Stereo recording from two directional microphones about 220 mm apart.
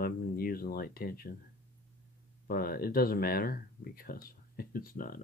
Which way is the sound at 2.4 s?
40° left (ahead or behind).